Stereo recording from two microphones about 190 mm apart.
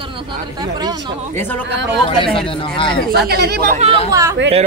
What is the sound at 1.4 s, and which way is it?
Speech, 10° left (ahead or behind).